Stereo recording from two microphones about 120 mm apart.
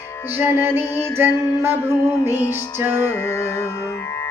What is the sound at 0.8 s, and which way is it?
Music, 35° left (ahead or behind).